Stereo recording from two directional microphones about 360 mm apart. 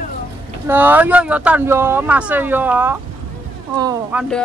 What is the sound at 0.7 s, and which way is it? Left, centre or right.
Speech, centre.